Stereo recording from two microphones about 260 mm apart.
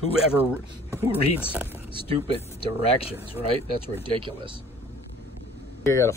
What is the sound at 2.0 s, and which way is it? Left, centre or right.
Speech, left.